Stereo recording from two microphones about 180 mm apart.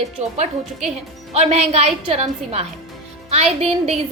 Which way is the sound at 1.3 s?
35° right (ahead or behind).